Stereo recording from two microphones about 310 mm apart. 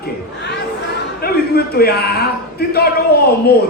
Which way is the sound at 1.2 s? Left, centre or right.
Left.